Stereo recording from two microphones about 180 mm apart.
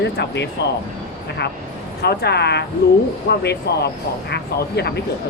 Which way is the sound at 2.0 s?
65° left (ahead or behind).